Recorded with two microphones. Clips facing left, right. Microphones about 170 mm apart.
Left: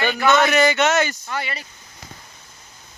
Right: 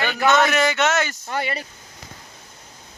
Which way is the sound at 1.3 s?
50° right (ahead or behind).